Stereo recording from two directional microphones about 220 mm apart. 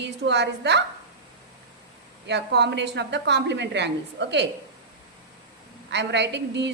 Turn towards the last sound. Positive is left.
turn(degrees=-50)  # may be behind; listen again after turning